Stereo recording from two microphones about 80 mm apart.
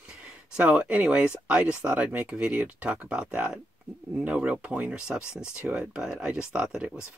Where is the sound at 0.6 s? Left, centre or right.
Centre.